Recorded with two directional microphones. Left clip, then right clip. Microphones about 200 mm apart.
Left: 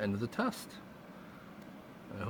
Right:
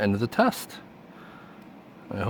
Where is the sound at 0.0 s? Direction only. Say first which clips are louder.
Right 12 dB; 50° right (ahead or behind).